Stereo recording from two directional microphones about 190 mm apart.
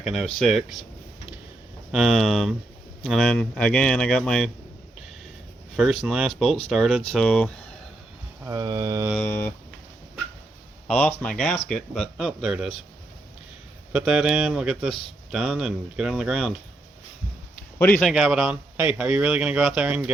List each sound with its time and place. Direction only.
0.0 s a man's voice: centre (ahead or behind)
1.9 s a man's voice: centre (ahead or behind)
6.1 s a man's voice: centre (ahead or behind)
8.4 s mantra: 20° right (ahead or behind)
9.1 s speech: 10° left (ahead or behind)
11.2 s a man's voice: 5° left (ahead or behind)
13.9 s a man's voice: 5° right (ahead or behind)
17.7 s speech: 10° left (ahead or behind)
18.1 s a man's voice: centre (ahead or behind)